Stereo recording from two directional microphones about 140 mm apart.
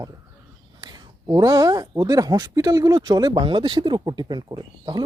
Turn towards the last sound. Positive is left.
turn(degrees=-30)  # may be behind; listen again after turning